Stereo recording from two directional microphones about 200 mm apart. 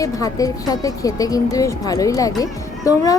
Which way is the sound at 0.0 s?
15° left (ahead or behind).